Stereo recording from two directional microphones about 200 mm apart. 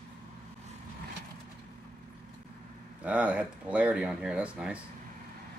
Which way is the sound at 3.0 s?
5° right (ahead or behind).